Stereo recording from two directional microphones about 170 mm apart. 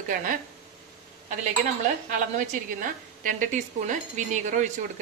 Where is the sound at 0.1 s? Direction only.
55° right (ahead or behind).